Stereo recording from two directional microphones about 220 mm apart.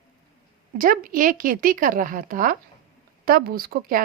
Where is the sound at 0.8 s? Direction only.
40° right (ahead or behind).